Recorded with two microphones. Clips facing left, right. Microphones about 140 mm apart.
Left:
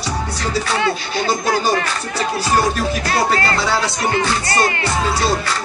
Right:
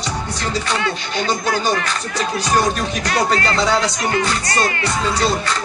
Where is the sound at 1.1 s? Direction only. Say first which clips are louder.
Left 1 dB; 10° left (ahead or behind).